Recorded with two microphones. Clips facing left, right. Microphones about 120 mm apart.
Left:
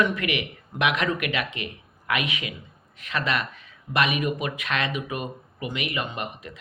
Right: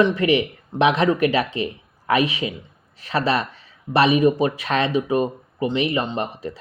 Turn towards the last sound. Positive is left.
turn(degrees=-35)  # may be behind; listen again after turning